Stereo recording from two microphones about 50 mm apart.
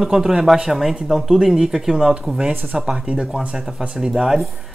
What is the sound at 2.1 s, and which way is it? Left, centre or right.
Speech, centre.